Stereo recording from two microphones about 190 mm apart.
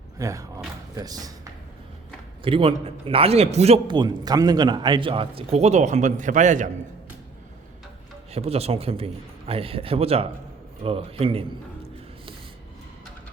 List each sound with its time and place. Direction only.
0.2 s a man's voice: 15° right (ahead or behind)
2.4 s a man's voice: 30° right (ahead or behind)
8.3 s a man's voice: 30° right (ahead or behind)